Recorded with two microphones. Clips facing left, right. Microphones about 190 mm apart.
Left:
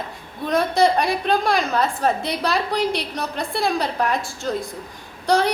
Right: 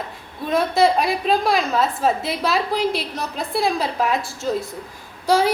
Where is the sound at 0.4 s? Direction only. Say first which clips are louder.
Right 1 dB; centre (ahead or behind).